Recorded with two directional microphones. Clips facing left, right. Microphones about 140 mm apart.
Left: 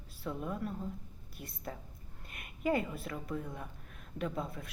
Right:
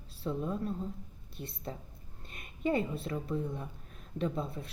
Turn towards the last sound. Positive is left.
turn(degrees=-30)  # may be behind; listen again after turning